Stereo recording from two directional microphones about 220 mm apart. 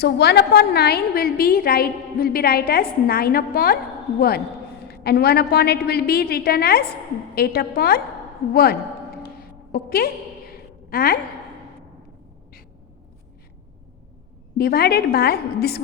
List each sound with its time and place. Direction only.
0.0 s a woman's voice: 45° left (ahead or behind)
4.9 s a woman's voice: 45° left (ahead or behind)
14.6 s a woman's voice: 45° left (ahead or behind)